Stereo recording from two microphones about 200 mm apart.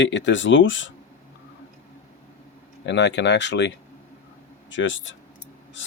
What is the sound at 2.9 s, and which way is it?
Speech, 60° left (ahead or behind).